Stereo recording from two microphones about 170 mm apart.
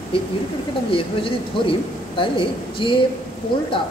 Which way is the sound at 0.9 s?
30° left (ahead or behind).